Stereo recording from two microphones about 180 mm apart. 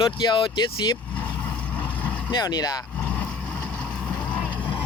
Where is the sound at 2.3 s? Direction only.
25° left (ahead or behind).